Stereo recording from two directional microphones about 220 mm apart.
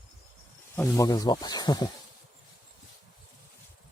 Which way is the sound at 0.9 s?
15° left (ahead or behind).